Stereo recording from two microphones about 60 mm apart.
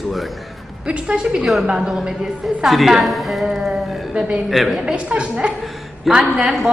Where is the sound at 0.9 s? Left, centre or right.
Centre.